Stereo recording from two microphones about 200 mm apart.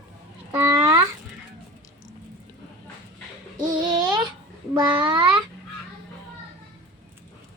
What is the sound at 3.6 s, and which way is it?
Babbling, 20° right (ahead or behind).